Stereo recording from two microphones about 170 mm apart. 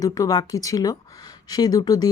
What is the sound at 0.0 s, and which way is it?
Speech, 20° left (ahead or behind).